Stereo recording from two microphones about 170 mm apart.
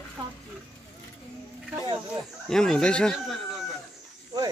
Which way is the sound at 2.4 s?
5° left (ahead or behind).